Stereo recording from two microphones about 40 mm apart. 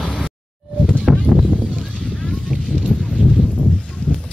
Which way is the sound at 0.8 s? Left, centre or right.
Centre.